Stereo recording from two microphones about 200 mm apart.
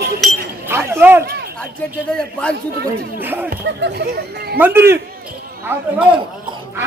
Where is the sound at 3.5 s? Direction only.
55° right (ahead or behind).